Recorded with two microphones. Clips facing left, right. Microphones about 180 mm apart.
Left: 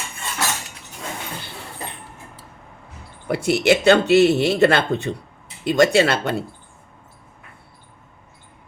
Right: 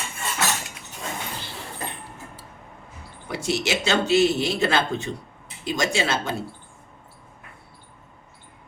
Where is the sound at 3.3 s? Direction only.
60° left (ahead or behind).